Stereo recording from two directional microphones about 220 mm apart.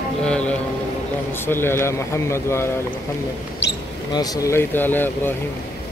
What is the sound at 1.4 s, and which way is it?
Speech, 10° left (ahead or behind).